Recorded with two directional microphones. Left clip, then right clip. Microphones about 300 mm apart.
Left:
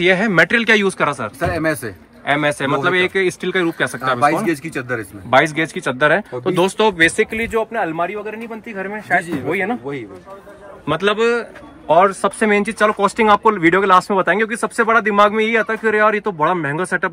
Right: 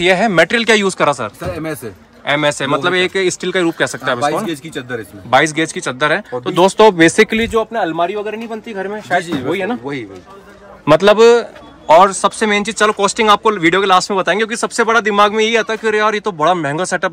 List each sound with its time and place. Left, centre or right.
0.0 s speech: centre
6.6 s speech: centre
7.2 s speech: right
7.5 s speech: centre
10.9 s speech: centre
11.9 s speech: centre